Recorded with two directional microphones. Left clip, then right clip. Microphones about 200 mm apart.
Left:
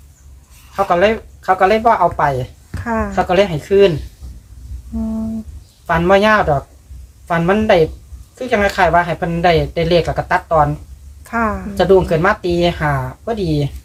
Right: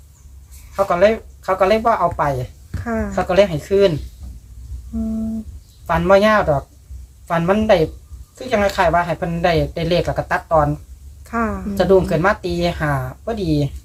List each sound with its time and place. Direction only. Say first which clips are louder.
0.9 s speech: left 1 dB; 10° right (ahead or behind)
2.8 s a woman's voice: left 4 dB; 5° left (ahead or behind)
3.1 s speech: even; 10° right (ahead or behind)
5.8 s speech: left 1 dB; 10° right (ahead or behind)
11.2 s a woman's voice: left 4 dB; 5° left (ahead or behind)
11.7 s speech: left 2 dB; 10° right (ahead or behind)